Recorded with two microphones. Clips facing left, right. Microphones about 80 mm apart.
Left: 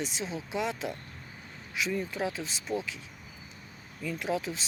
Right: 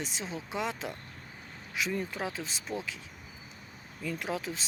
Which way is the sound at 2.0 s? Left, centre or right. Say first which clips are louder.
Left 2 dB; right.